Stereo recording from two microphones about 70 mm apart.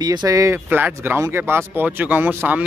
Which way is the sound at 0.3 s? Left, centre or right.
Right.